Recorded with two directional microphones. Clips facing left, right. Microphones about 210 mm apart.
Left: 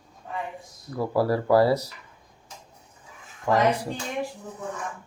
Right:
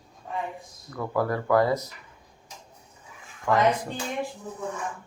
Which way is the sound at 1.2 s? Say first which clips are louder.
Left 3 dB; 30° left (ahead or behind).